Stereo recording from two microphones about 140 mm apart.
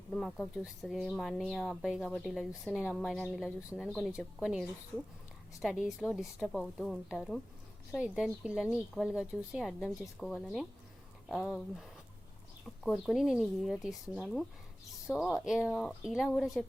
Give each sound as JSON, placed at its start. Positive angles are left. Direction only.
{"t": 0.1, "sound": "speech", "side_deg": 5}